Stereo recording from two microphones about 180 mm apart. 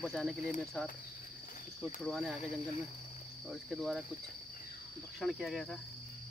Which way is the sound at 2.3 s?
40° left (ahead or behind).